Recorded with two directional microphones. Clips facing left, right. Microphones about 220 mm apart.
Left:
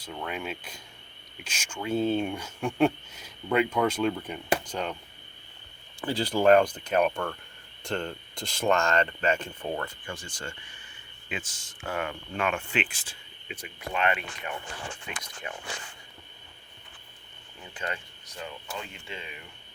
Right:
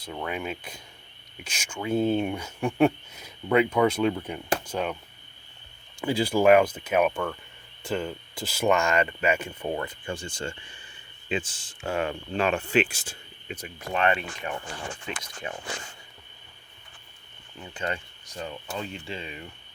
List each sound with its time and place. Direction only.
0.0 s speech: 10° right (ahead or behind)
6.0 s speech: 10° right (ahead or behind)
10.1 s speech: 25° right (ahead or behind)
17.7 s speech: 30° right (ahead or behind)